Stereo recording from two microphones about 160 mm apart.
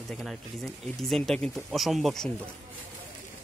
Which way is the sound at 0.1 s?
Centre (ahead or behind).